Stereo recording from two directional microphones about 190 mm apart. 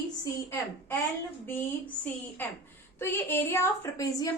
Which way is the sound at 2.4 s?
10° left (ahead or behind).